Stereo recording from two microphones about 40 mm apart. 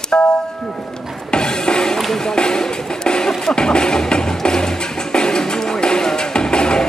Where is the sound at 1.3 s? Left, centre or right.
Centre.